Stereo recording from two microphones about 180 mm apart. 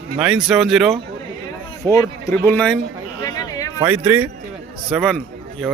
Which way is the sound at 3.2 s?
20° left (ahead or behind).